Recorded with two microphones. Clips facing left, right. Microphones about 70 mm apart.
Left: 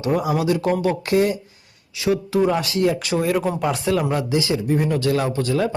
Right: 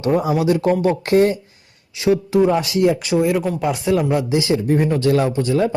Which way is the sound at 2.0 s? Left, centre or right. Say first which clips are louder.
Right 4 dB; right.